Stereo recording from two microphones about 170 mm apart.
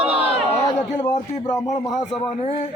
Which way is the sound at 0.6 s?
25° left (ahead or behind).